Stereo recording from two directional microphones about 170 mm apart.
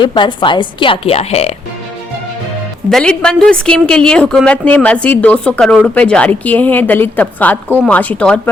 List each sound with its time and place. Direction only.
0.0 s a woman's voice: 25° left (ahead or behind)
2.9 s a woman's voice: 5° left (ahead or behind)